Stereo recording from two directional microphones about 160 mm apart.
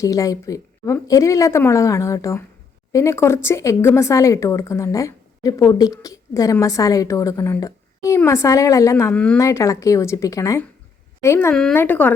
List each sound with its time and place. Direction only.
0.0 s speech: 20° left (ahead or behind)
9.1 s a woman's voice: 10° left (ahead or behind)
9.4 s a woman's voice: 20° left (ahead or behind)
11.5 s a woman's voice: 5° left (ahead or behind)